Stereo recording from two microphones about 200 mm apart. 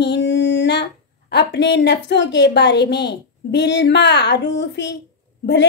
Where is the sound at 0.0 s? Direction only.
60° left (ahead or behind).